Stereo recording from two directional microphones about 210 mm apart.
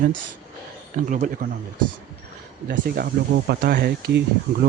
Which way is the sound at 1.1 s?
40° right (ahead or behind).